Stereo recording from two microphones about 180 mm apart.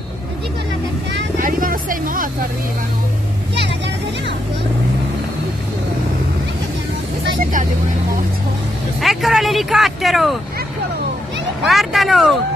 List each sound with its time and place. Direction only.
1.1 s vehicle: 50° right (ahead or behind)
9.0 s speech: centre (ahead or behind)
11.6 s speech: centre (ahead or behind)